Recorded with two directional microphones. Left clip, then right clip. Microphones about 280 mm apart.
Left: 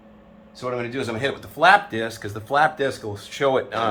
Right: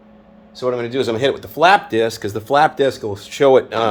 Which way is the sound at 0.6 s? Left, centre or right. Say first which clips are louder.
Right 8 dB; right.